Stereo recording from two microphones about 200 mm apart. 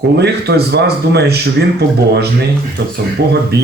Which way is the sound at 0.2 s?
55° right (ahead or behind).